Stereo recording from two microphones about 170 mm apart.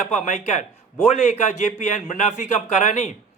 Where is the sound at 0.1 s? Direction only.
45° left (ahead or behind).